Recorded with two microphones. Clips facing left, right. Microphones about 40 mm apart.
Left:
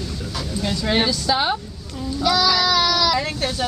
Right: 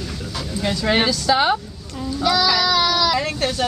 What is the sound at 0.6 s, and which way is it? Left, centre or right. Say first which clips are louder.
Speech: right 2 dB; right.